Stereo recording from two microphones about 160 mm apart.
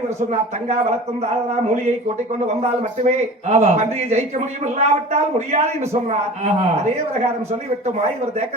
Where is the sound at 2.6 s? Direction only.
45° right (ahead or behind).